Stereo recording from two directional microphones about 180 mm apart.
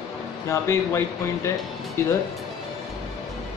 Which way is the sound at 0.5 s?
15° left (ahead or behind).